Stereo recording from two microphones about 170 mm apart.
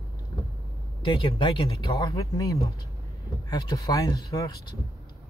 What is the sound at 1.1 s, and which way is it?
Speech, 30° left (ahead or behind).